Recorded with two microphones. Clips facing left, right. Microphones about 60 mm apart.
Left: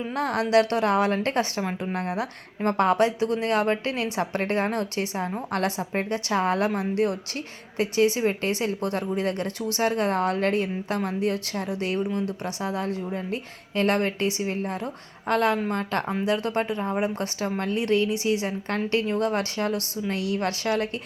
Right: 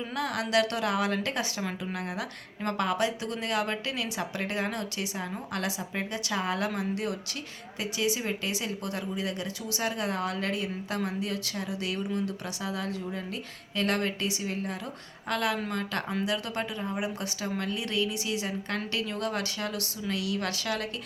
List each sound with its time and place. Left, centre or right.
0.2 s a woman's voice: left